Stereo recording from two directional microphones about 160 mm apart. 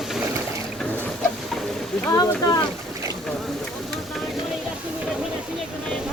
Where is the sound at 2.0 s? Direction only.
20° left (ahead or behind).